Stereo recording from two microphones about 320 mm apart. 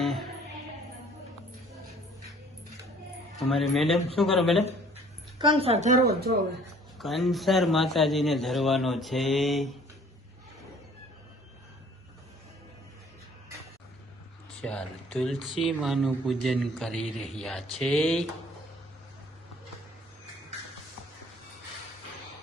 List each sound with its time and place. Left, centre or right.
0.0 s music: centre
3.3 s speech: centre
5.4 s speech: centre
7.0 s speech: centre
14.6 s speech: centre